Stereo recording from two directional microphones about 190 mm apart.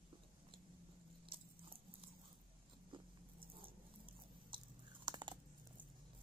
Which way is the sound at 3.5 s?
30° right (ahead or behind).